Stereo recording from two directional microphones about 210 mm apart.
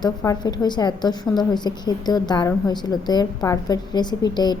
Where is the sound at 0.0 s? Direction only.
15° left (ahead or behind).